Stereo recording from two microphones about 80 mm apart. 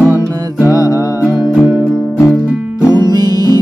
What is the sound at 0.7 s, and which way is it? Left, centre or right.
Music, left.